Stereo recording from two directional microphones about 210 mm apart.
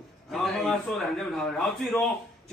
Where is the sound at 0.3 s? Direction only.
Centre (ahead or behind).